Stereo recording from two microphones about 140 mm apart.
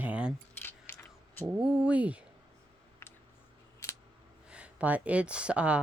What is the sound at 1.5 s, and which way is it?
Speech, 5° right (ahead or behind).